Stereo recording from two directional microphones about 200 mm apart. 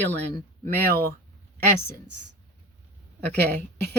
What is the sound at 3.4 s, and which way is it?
Speech, 55° right (ahead or behind).